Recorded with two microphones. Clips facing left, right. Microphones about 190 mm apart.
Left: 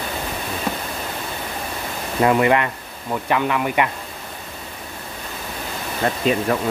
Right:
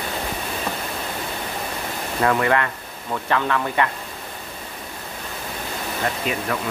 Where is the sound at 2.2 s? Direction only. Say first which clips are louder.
Left 3 dB; 20° left (ahead or behind).